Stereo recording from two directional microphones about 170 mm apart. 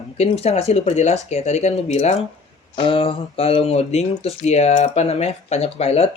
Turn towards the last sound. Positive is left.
turn(degrees=35)  # may be behind; listen again after turning